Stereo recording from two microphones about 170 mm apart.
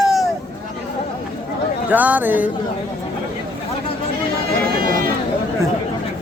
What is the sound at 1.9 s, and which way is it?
Speech, 10° right (ahead or behind).